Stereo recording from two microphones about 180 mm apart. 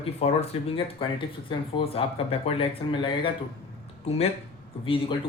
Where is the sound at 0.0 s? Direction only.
35° left (ahead or behind).